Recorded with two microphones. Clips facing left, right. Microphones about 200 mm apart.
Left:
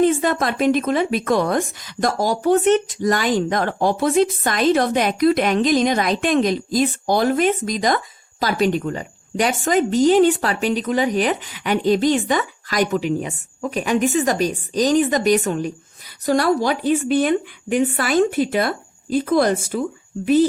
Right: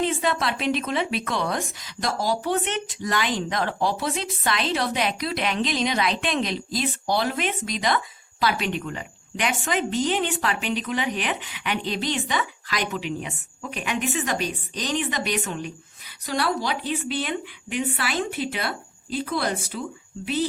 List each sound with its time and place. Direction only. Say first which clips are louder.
0.0 s speech: left 7 dB; 45° left (ahead or behind)